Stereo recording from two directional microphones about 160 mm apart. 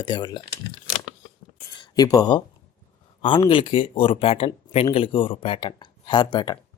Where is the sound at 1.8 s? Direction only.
25° left (ahead or behind).